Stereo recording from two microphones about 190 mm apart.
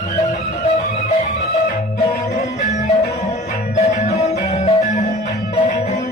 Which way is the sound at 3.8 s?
35° left (ahead or behind).